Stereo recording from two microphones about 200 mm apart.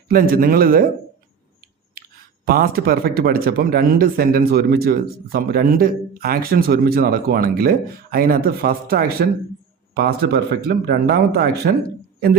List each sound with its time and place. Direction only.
0.1 s speech: 45° right (ahead or behind)
2.0 s speech: 50° right (ahead or behind)